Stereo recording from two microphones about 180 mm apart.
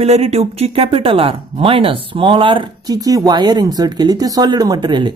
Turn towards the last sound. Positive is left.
turn(degrees=-25)  # may be behind; listen again after turning